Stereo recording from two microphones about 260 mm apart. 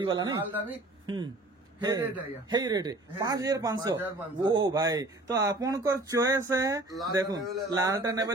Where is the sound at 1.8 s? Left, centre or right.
Centre.